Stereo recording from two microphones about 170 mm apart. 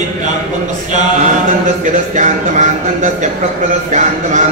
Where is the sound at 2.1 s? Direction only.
45° right (ahead or behind).